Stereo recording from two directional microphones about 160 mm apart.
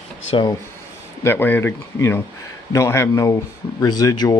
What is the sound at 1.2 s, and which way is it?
Speech, 15° left (ahead or behind).